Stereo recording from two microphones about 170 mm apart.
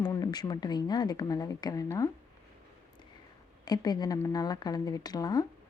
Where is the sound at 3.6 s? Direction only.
25° left (ahead or behind).